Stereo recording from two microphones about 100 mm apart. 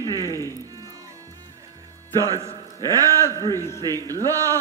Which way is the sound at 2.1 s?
35° right (ahead or behind).